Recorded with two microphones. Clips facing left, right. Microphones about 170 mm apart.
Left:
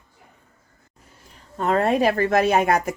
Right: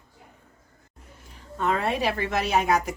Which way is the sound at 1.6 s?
45° left (ahead or behind).